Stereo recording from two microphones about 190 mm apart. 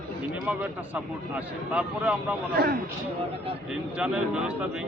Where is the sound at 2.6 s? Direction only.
55° right (ahead or behind).